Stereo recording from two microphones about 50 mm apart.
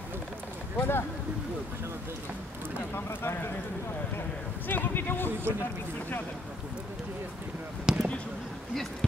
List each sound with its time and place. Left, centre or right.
0.7 s speech: left
2.9 s speech: left
4.6 s speech: left
7.8 s speech: centre